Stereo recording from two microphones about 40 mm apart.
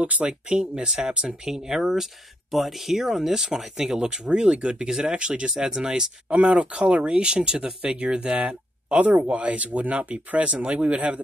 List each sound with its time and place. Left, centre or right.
0.0 s speech: right
1.4 s speech: centre; by 5.5 s right
5.5 s speech: centre
6.2 s speech: right